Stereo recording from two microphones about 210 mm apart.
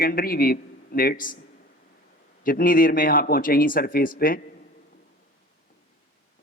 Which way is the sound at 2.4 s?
40° left (ahead or behind).